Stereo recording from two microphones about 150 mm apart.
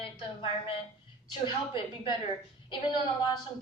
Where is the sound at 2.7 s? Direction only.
30° left (ahead or behind).